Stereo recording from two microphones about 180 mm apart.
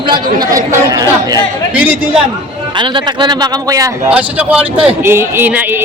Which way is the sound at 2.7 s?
25° right (ahead or behind).